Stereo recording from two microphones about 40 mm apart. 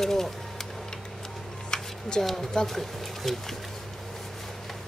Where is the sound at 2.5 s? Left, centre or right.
Centre.